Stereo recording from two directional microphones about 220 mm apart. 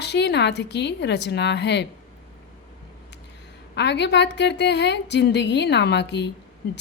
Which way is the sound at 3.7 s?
50° left (ahead or behind).